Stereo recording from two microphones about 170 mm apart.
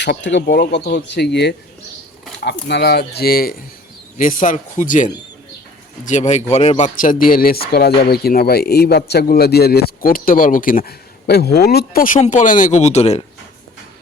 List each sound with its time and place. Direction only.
0.0 s speech: 85° left
3.2 s speech: 65° left (ahead or behind)
4.2 s speech: 50° left (ahead or behind)
6.1 s speech: 45° left (ahead or behind)